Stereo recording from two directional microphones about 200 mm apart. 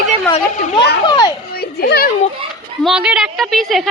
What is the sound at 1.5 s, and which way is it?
Children playing, 50° left (ahead or behind).